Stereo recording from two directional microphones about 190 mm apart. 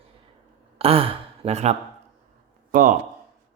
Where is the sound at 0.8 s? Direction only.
30° right (ahead or behind).